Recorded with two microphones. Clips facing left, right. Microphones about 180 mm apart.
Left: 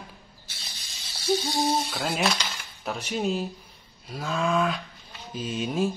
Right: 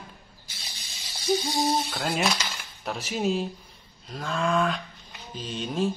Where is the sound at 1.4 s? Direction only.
Centre (ahead or behind).